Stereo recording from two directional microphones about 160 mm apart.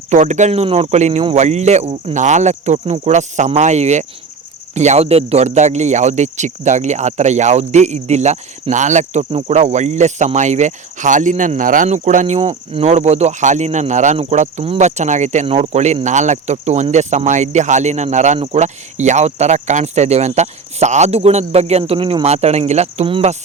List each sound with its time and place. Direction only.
0.1 s speech: 50° right (ahead or behind)